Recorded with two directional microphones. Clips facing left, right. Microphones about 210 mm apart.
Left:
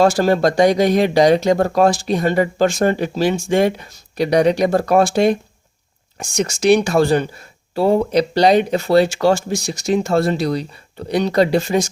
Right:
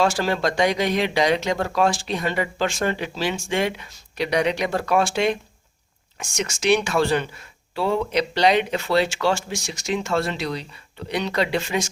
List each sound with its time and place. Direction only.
0.0 s speech: 40° left (ahead or behind)